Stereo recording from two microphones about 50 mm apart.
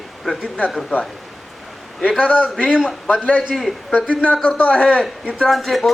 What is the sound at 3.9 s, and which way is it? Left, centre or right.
Speech, centre.